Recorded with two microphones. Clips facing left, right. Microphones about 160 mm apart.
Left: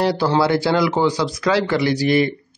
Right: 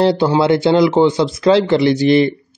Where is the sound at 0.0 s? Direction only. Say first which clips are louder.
Right 4 dB; 25° right (ahead or behind).